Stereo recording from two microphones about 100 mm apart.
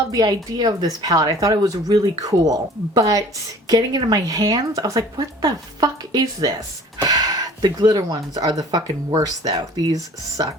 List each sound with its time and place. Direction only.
0.1 s speech: 45° right (ahead or behind)